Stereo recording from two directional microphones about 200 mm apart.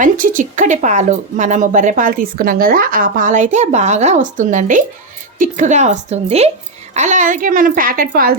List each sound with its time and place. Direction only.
0.0 s a child's voice: 40° right (ahead or behind)